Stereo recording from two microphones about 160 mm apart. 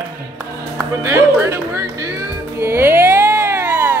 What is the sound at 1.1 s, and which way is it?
Music, 15° right (ahead or behind).